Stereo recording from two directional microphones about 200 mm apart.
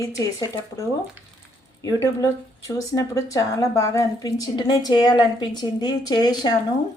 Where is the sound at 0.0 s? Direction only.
15° left (ahead or behind).